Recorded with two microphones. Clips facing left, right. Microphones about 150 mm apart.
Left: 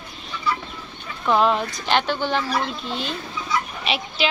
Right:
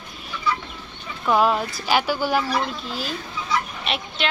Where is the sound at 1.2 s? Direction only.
5° right (ahead or behind).